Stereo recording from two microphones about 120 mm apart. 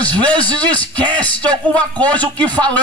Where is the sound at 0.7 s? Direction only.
10° left (ahead or behind).